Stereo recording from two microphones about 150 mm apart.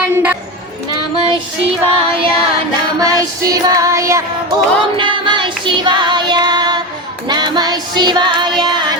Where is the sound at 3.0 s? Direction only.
25° right (ahead or behind).